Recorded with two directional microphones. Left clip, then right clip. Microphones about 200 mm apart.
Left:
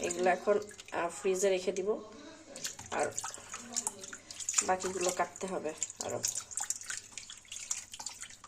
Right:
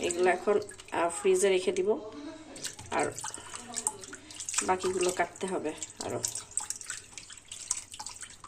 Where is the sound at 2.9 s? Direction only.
10° left (ahead or behind).